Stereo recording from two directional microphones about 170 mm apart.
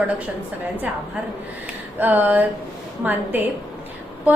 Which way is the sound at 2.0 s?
10° right (ahead or behind).